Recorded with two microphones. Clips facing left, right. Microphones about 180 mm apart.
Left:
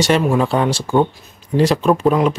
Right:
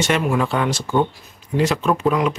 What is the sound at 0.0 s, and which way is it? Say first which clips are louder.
Speech: left 4 dB; 30° left (ahead or behind).